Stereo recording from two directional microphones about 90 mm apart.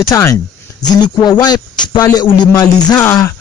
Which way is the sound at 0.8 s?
50° left (ahead or behind).